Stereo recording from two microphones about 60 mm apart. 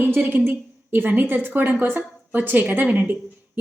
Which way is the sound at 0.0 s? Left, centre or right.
Right.